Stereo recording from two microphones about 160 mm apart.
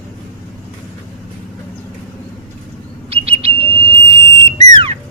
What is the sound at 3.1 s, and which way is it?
Bird, 40° right (ahead or behind).